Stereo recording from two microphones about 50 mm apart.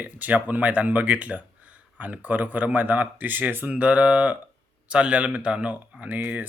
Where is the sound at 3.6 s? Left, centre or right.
Right.